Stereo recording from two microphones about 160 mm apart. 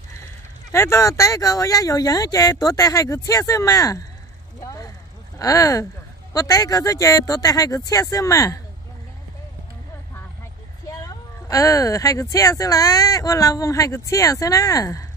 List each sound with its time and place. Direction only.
0.7 s speech: 15° left (ahead or behind)
4.6 s a sound: 20° left (ahead or behind)
5.4 s speech: 20° left (ahead or behind)
10.9 s speech: 20° left (ahead or behind)